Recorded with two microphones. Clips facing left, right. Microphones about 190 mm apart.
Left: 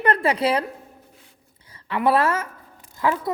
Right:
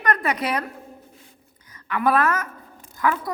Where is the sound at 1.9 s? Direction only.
25° left (ahead or behind).